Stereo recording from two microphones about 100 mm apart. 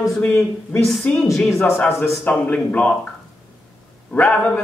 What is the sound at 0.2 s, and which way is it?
Speech, 20° left (ahead or behind).